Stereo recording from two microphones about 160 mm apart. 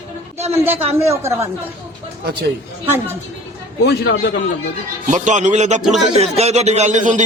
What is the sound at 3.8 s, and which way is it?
Speech, 90° left.